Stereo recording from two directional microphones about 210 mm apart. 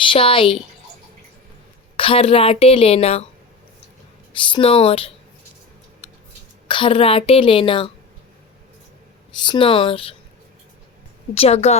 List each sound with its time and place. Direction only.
0.1 s a woman's voice: 25° left (ahead or behind)
2.0 s a woman's voice: 25° left (ahead or behind)
4.3 s a woman's voice: 25° left (ahead or behind)
6.0 s a sound: 30° left (ahead or behind)
6.7 s a woman's voice: 25° left (ahead or behind)
9.5 s a woman's voice: 25° left (ahead or behind)
11.3 s a woman's voice: 30° left (ahead or behind)